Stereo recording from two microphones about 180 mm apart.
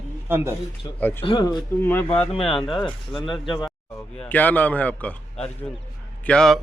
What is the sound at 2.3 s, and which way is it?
Speech, 30° left (ahead or behind).